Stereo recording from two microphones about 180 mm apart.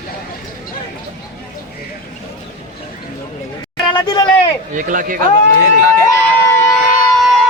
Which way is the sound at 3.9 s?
25° left (ahead or behind).